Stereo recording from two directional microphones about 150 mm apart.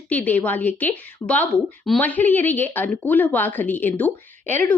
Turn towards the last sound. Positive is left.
turn(degrees=10)  # may be behind; listen again after turning